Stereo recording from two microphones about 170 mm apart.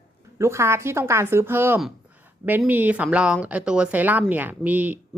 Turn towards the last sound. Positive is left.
turn(degrees=-10)  # may be behind; listen again after turning